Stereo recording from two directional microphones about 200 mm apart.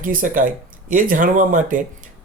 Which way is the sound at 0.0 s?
45° right (ahead or behind).